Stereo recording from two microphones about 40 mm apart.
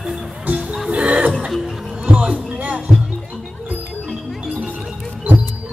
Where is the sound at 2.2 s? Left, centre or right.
Right.